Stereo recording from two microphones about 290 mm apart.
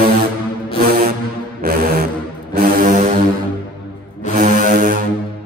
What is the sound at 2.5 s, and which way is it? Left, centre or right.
Foghorn, right.